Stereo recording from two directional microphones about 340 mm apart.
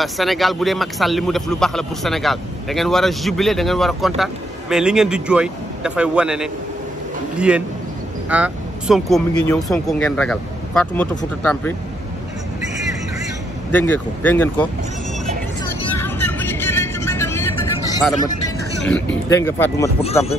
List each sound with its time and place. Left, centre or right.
0.0 s a man's voice: centre
13.7 s a man's voice: centre
15.8 s vehicle: centre
19.2 s speech: centre
20.0 s speech: centre